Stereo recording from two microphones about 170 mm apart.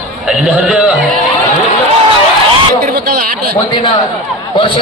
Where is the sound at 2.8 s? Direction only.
65° right (ahead or behind).